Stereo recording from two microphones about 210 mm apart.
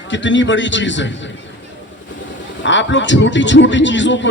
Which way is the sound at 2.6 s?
60° left (ahead or behind).